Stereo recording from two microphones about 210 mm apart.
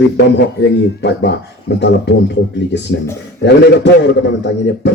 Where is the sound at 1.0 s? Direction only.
55° left (ahead or behind).